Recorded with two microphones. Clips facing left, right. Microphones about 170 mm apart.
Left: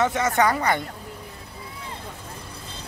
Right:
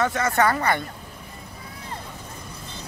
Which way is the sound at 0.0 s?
15° left (ahead or behind).